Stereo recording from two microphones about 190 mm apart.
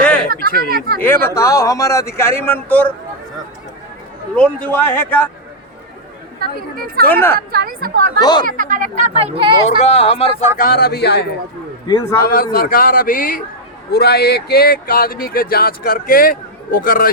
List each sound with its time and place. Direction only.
0.0 s a sound: 10° left (ahead or behind)
1.0 s speech: 10° left (ahead or behind)
4.4 s speech: 10° left (ahead or behind)
6.4 s speech: 50° right (ahead or behind)
7.0 s speech: 10° left (ahead or behind)
7.3 s speech: 55° right (ahead or behind)
8.2 s speech: 20° left (ahead or behind)
8.4 s speech: 45° right (ahead or behind)
9.6 s speech: 35° left (ahead or behind)
10.6 s speech: 55° left (ahead or behind)
13.9 s speech: 60° left (ahead or behind)